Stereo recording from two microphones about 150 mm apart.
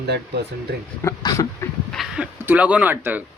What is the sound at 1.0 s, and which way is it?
Speech, 20° left (ahead or behind).